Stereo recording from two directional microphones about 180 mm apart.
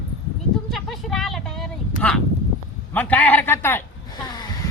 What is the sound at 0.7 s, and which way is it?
Speech, centre (ahead or behind).